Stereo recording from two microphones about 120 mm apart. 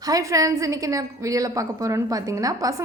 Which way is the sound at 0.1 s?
25° right (ahead or behind).